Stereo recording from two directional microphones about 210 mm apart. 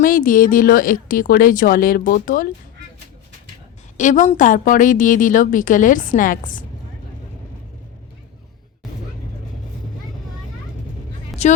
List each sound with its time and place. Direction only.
0.0 s a woman's voice: 40° left (ahead or behind)
3.9 s a woman's voice: 35° left (ahead or behind)
11.3 s vehicle: centre (ahead or behind)